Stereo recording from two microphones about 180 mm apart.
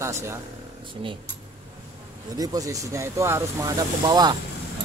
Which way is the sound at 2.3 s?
20° right (ahead or behind).